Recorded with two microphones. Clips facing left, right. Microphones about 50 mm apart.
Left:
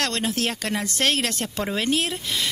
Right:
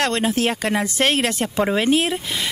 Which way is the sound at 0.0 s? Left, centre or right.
Centre.